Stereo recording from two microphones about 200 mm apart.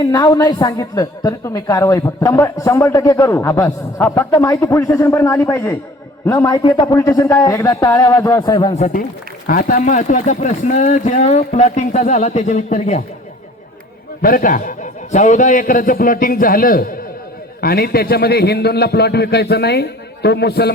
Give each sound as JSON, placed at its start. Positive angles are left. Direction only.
{"t": 0.0, "sound": "a woman's voice", "side_deg": 20}
{"t": 8.7, "sound": "speech", "side_deg": 40}
{"t": 14.2, "sound": "a man's voice", "side_deg": 45}